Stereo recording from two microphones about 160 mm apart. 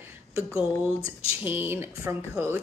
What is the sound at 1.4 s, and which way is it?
A woman's voice, 15° right (ahead or behind).